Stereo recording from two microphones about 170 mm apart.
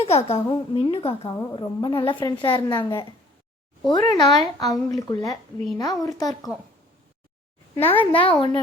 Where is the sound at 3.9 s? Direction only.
25° left (ahead or behind).